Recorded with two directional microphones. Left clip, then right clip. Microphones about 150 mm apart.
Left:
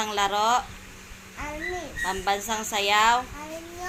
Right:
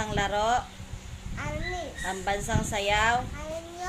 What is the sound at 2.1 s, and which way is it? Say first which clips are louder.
A woman's voice: left 3 dB; 20° right (ahead or behind).